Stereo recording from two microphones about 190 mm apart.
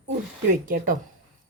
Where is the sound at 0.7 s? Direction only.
45° right (ahead or behind).